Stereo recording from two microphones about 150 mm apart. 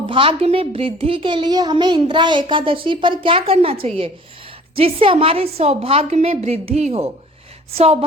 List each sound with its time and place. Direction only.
0.1 s a child's voice: 35° right (ahead or behind)